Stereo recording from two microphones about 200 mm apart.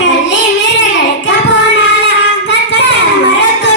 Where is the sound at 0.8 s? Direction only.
65° left (ahead or behind).